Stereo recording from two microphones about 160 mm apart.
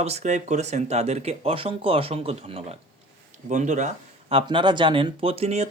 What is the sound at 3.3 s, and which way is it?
Speech, 50° right (ahead or behind).